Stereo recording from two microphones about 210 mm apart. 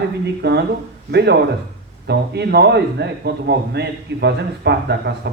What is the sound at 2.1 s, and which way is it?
A man's voice, 50° right (ahead or behind).